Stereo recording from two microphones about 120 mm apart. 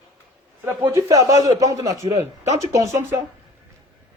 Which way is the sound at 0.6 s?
20° right (ahead or behind).